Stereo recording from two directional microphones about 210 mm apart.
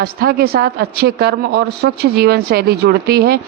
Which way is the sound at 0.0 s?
45° right (ahead or behind).